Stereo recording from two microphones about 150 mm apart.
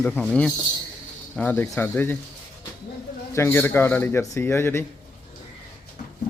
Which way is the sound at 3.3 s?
15° left (ahead or behind).